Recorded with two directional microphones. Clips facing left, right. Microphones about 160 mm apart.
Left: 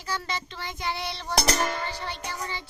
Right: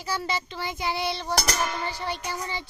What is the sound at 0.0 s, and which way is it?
Child singing, 10° right (ahead or behind).